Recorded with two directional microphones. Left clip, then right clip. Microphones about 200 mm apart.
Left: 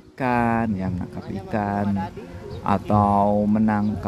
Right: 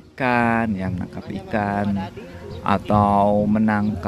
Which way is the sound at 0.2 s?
5° left (ahead or behind).